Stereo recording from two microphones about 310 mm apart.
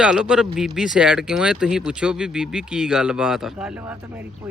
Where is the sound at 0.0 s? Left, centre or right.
Centre.